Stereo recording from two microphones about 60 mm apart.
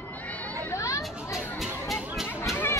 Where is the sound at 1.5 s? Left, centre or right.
Centre.